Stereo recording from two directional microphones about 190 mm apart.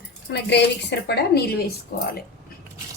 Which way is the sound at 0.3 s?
65° left (ahead or behind).